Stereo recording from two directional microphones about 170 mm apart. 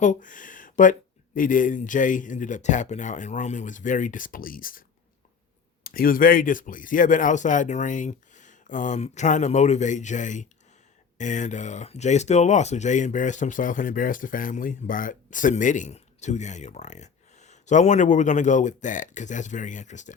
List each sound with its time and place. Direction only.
0.0 s a sound: 50° left (ahead or behind)
1.4 s speech: 50° left (ahead or behind)
5.8 s speech: 60° left (ahead or behind)